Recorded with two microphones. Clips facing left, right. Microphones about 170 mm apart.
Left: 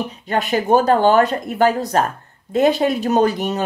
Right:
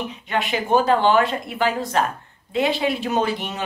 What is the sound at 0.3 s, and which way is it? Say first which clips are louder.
Speech: left 4 dB; 40° left (ahead or behind).